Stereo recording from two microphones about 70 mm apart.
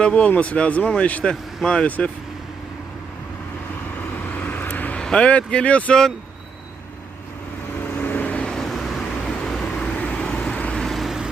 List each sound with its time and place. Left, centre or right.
0.0 s speech: centre
4.1 s vehicle: left
5.0 s speech: centre
7.8 s vehicle: left; by 9.9 s centre
10.0 s vehicle: centre
10.8 s vehicle: centre